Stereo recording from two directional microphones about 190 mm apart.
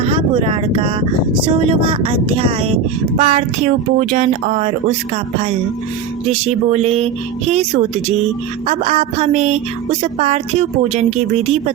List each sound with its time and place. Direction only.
0.0 s speech: 30° right (ahead or behind)
6.2 s speech: 35° right (ahead or behind)